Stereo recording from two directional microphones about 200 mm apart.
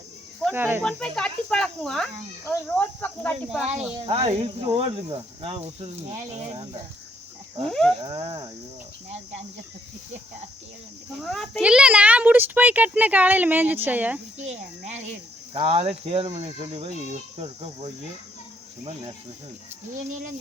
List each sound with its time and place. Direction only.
0.5 s speech: 10° right (ahead or behind)
0.8 s speech: 5° left (ahead or behind)
4.0 s speech: 30° right (ahead or behind)
7.7 s speech: 5° left (ahead or behind)
8.0 s speech: 30° right (ahead or behind)
11.2 s speech: centre (ahead or behind)
14.3 s speech: 35° right (ahead or behind)